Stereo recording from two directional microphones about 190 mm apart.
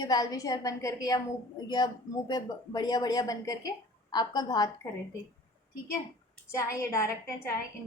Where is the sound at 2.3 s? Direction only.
20° left (ahead or behind).